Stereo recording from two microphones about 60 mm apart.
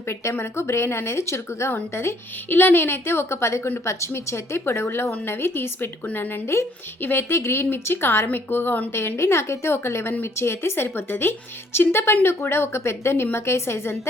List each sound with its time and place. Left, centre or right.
0.1 s a woman's voice: left
1.7 s a woman's voice: left
8.9 s a woman's voice: left